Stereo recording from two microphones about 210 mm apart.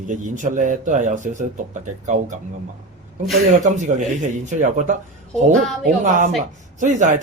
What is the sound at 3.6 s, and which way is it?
Speech, 35° right (ahead or behind).